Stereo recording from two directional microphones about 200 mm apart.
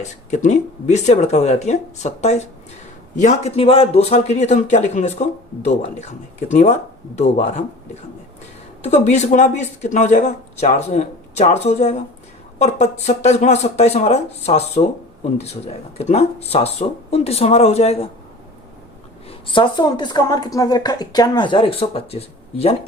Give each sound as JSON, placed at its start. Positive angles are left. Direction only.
{"t": 0.0, "sound": "speech", "side_deg": 35}
{"t": 8.8, "sound": "speech", "side_deg": 35}
{"t": 19.5, "sound": "a woman's voice", "side_deg": 20}